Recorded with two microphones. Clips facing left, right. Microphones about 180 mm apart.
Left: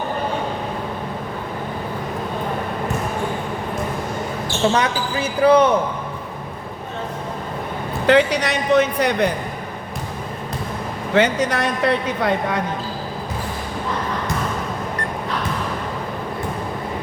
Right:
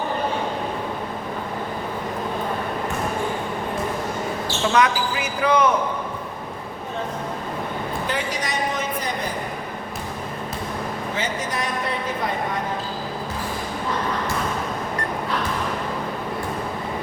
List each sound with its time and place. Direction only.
4.7 s speech: 30° left (ahead or behind)
8.0 s a man's voice: 70° left (ahead or behind)
11.1 s a man's voice: 70° left (ahead or behind)